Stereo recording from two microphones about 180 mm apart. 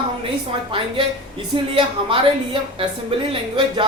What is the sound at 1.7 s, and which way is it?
A woman's voice, 30° right (ahead or behind).